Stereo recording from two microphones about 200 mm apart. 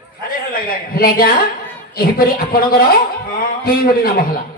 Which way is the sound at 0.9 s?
50° left (ahead or behind).